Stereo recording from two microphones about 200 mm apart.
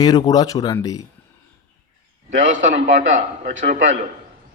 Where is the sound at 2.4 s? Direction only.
40° right (ahead or behind).